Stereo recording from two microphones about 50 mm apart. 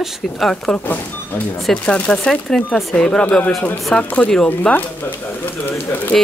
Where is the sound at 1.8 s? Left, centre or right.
Left.